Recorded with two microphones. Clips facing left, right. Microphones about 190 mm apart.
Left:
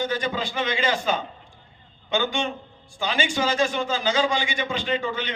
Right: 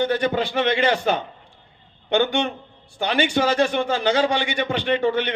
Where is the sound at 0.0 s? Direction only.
60° right (ahead or behind).